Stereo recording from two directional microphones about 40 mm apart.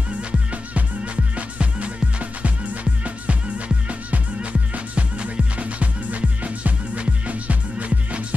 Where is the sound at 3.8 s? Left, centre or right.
Right.